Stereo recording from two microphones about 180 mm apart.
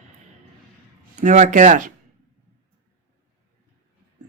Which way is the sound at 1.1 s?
40° right (ahead or behind).